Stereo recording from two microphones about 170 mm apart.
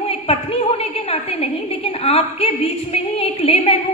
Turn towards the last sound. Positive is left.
turn(degrees=40)  # may be behind; listen again after turning